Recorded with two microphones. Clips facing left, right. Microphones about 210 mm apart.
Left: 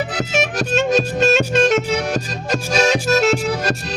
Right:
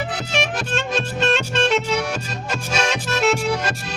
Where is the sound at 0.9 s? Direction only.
40° left (ahead or behind).